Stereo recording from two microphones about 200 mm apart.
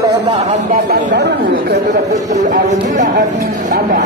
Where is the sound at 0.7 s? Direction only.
40° right (ahead or behind).